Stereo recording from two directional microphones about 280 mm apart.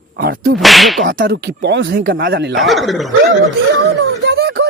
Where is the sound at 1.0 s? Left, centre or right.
Right.